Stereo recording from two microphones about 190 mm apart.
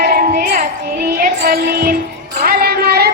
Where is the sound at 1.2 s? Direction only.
50° right (ahead or behind).